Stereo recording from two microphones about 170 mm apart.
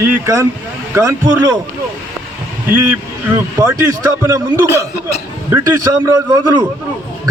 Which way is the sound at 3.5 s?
20° right (ahead or behind).